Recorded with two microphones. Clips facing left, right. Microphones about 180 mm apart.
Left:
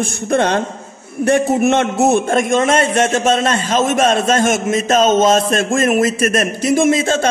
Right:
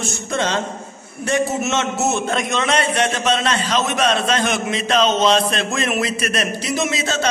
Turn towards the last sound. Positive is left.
turn(degrees=50)  # may be behind; listen again after turning